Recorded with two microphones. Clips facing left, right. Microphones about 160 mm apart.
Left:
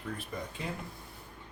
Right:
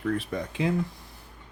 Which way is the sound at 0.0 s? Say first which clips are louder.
Right 10 dB; 85° right.